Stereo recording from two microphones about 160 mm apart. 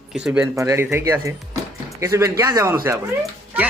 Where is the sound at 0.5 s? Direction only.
15° right (ahead or behind).